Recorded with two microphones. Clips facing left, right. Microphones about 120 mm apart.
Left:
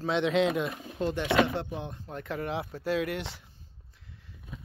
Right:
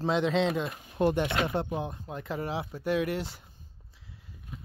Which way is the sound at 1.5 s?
40° right (ahead or behind).